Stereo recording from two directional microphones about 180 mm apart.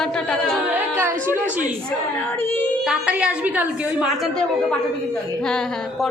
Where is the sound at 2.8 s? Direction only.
5° right (ahead or behind).